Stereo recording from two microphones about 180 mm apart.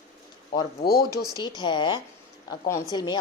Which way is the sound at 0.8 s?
55° left (ahead or behind).